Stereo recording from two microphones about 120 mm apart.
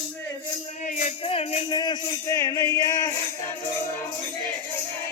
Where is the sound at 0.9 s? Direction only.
90° left.